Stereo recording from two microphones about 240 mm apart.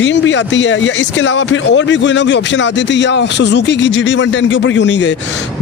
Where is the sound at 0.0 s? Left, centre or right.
Left.